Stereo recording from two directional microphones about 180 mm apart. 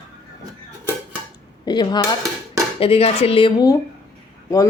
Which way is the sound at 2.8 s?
35° left (ahead or behind).